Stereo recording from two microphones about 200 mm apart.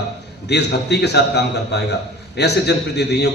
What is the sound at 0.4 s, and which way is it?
A man's voice, 55° left (ahead or behind).